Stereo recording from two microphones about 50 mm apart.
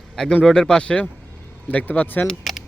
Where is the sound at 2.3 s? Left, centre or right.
Centre.